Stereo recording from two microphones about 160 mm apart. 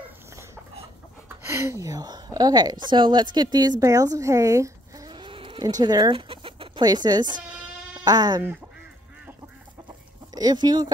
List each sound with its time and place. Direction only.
1.4 s a woman's voice: 15° right (ahead or behind)
3.8 s a sound: 20° right (ahead or behind)
5.8 s a woman's voice: 25° right (ahead or behind)
9.8 s chicken: 25° right (ahead or behind)